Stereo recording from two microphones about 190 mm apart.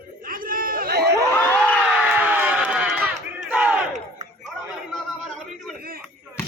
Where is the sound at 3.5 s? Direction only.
5° right (ahead or behind).